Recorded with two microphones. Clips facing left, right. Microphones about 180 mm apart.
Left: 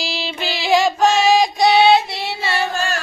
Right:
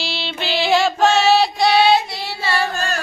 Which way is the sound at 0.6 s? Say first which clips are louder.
Left 1 dB; 10° left (ahead or behind).